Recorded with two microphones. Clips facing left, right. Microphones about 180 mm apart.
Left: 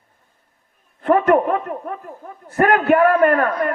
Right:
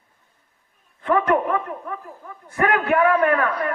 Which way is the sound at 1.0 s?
55° left (ahead or behind).